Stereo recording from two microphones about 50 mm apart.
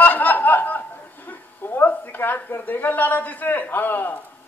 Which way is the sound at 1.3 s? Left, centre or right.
Left.